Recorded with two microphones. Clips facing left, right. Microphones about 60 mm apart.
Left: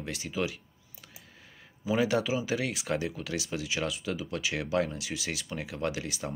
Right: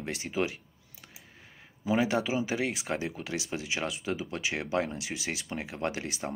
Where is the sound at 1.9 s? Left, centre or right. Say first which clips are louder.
Even; centre.